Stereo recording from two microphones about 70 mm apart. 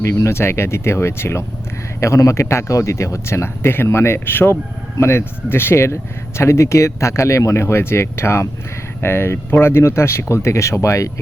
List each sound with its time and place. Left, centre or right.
0.0 s speech: left